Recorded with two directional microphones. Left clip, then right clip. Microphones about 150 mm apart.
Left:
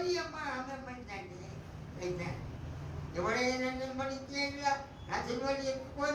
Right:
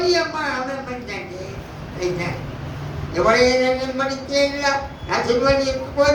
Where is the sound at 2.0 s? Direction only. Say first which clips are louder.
Right 15 dB; 55° right (ahead or behind).